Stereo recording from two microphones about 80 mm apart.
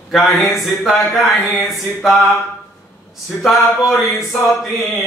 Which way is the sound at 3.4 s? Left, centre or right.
Centre.